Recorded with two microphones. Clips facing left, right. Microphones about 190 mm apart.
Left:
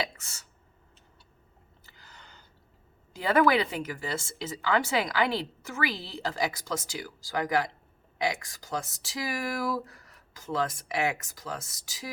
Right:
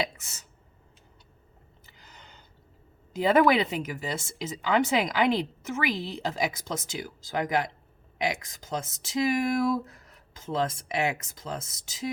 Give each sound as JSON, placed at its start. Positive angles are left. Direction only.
{"t": 0.0, "sound": "speech", "side_deg": -20}
{"t": 1.9, "sound": "a sound", "side_deg": -20}
{"t": 3.1, "sound": "speech", "side_deg": -20}